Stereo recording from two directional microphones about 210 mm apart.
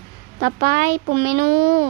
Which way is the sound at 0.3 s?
40° right (ahead or behind).